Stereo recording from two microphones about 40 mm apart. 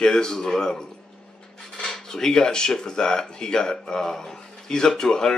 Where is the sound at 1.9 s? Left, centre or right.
Centre.